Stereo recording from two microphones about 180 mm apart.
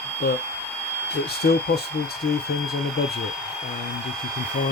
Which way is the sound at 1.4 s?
65° left (ahead or behind).